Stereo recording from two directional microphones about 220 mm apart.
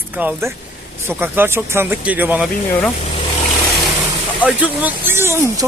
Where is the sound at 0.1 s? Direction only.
10° right (ahead or behind).